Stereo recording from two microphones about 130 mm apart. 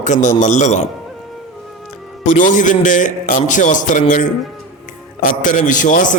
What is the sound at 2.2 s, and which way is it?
A man's voice, 80° left.